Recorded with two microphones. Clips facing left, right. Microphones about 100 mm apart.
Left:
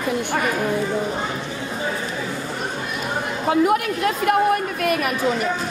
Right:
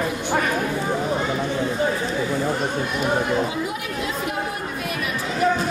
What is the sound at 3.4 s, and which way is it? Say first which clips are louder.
Chatter: left 8 dB; 60° left (ahead or behind).